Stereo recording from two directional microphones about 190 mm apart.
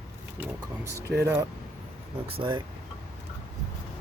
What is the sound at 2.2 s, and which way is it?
Speech, 30° right (ahead or behind).